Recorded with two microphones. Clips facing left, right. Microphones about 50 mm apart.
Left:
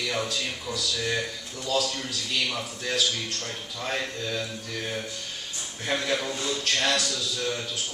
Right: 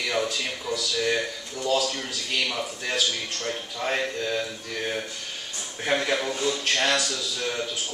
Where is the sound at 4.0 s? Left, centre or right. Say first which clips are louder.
Right 4 dB; centre.